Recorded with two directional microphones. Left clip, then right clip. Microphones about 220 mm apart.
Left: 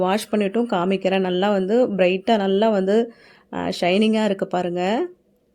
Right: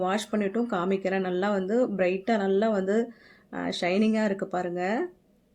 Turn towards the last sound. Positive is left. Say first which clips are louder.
# left 6 dB
turn(degrees=40)  # may be behind; listen again after turning